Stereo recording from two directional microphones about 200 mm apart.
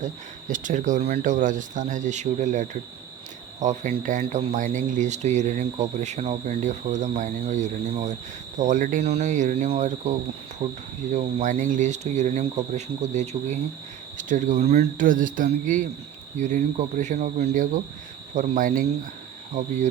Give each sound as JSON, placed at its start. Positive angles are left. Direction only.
{"t": 0.0, "sound": "speech", "side_deg": -40}
{"t": 10.6, "sound": "speech", "side_deg": -20}
{"t": 11.1, "sound": "speech", "side_deg": -35}